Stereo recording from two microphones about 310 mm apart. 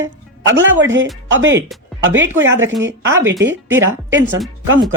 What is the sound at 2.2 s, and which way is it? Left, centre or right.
Speech, centre.